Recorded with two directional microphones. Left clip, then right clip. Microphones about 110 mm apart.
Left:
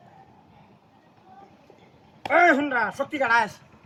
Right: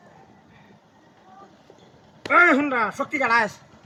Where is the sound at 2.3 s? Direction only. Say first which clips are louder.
Right 2 dB; 25° left (ahead or behind).